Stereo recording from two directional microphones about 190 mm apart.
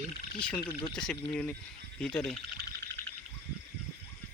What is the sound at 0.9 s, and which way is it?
Speech, 5° left (ahead or behind).